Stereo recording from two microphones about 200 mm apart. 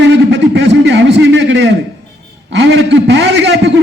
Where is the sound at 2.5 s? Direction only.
60° right (ahead or behind).